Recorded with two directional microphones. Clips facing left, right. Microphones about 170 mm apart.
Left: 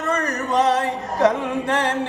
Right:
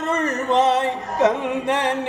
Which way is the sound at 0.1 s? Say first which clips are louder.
Right 2 dB; 25° right (ahead or behind).